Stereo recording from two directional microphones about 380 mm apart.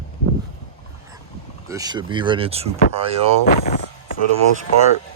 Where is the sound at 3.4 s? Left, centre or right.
Left.